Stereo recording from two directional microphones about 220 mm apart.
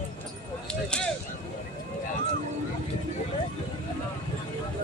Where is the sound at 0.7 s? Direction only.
5° left (ahead or behind).